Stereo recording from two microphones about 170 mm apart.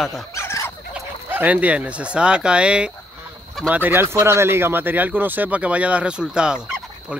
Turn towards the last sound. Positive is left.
turn(degrees=-5)  # may be behind; listen again after turning